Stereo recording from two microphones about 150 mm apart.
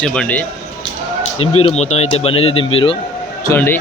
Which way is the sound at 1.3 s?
45° left (ahead or behind).